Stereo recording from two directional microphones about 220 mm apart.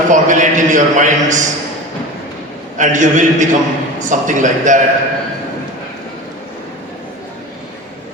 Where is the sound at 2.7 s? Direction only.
35° right (ahead or behind).